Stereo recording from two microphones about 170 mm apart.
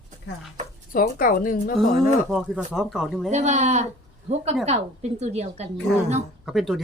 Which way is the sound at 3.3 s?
45° right (ahead or behind).